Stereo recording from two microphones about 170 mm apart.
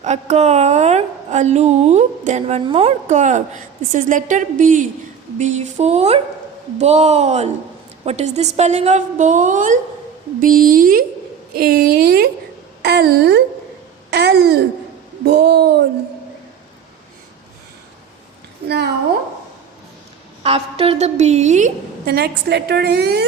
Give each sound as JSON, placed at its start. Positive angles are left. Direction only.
{"t": 0.0, "sound": "a woman's voice", "side_deg": -40}
{"t": 20.4, "sound": "a woman's voice", "side_deg": -35}
{"t": 22.0, "sound": "a woman's voice", "side_deg": -70}